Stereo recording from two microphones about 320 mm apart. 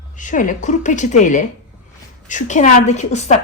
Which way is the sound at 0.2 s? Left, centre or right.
Left.